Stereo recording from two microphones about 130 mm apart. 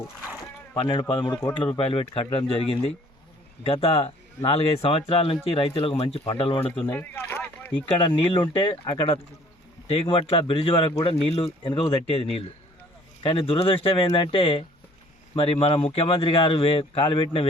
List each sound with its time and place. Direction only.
0.8 s a man's voice: 40° left (ahead or behind)
6.6 s speech: 15° left (ahead or behind)
8.0 s speech: 45° left (ahead or behind)